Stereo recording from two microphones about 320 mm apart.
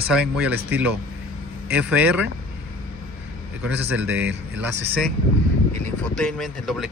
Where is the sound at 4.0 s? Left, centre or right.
Centre.